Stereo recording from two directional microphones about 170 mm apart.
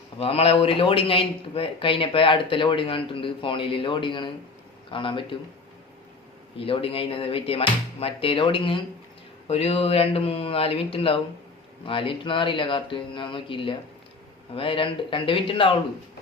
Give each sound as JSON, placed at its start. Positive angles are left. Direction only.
{"t": 0.2, "sound": "speech", "side_deg": 35}
{"t": 6.6, "sound": "speech", "side_deg": 35}